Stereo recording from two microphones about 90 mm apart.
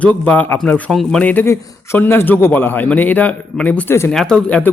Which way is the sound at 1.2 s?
20° left (ahead or behind).